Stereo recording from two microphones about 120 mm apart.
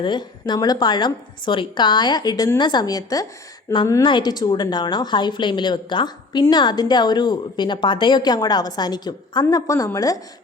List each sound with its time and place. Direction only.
0.0 s a woman's voice: 40° left (ahead or behind)
3.7 s a woman's voice: 20° left (ahead or behind)
4.0 s a woman's voice: 40° left (ahead or behind)